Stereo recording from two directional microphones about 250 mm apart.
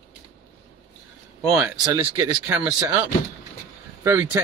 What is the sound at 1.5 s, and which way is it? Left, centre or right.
Speech, centre.